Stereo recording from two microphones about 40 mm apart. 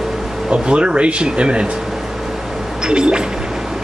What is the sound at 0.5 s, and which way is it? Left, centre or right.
Speech, right.